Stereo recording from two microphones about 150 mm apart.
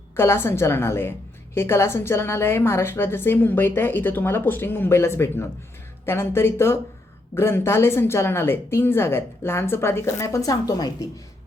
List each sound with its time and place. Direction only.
0.2 s a woman's voice: 15° left (ahead or behind)